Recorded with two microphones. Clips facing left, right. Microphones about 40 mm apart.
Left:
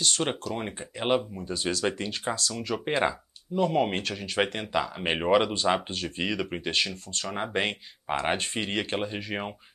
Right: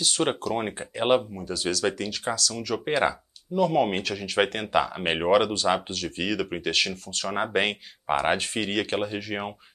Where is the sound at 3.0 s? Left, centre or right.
Centre.